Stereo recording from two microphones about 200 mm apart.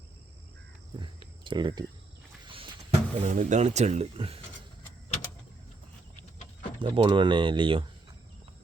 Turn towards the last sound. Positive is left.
turn(degrees=-25)  # may be behind; listen again after turning